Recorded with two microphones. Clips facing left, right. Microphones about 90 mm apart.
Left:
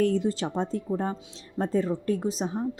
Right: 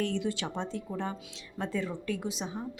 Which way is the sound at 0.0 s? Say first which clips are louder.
Left 7 dB; 40° left (ahead or behind).